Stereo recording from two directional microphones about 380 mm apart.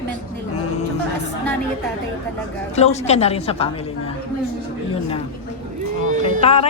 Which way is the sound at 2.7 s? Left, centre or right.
Centre.